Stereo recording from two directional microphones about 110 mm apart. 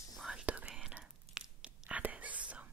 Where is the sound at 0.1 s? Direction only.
5° right (ahead or behind).